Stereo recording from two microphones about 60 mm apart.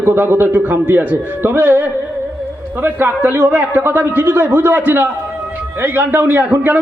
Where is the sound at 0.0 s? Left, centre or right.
Right.